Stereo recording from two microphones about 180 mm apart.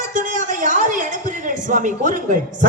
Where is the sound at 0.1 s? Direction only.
45° right (ahead or behind).